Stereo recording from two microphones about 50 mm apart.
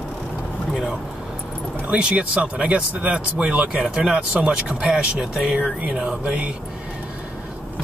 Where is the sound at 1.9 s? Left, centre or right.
Right.